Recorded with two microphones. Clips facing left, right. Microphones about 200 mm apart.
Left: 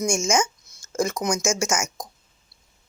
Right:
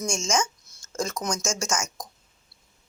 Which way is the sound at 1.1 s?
15° left (ahead or behind).